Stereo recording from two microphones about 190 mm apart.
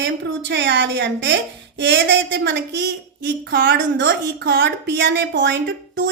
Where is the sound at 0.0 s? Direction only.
70° right (ahead or behind).